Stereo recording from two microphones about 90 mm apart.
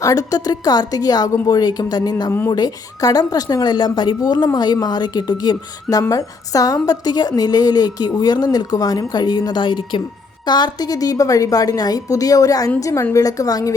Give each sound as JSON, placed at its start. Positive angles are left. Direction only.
{"t": 0.0, "sound": "a woman's voice", "side_deg": 40}
{"t": 6.0, "sound": "a woman's voice", "side_deg": 40}